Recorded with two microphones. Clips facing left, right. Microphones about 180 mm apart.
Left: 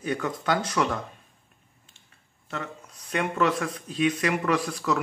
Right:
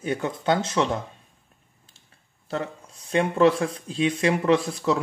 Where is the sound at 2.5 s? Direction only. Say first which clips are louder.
Right 5 dB; 30° right (ahead or behind).